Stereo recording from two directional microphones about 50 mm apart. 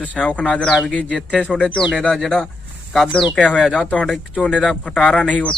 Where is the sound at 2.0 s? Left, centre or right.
Centre.